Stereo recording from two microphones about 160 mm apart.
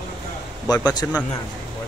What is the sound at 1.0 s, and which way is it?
Speech, 15° left (ahead or behind).